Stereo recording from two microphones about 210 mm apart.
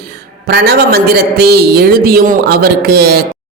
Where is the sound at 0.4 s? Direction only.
45° right (ahead or behind).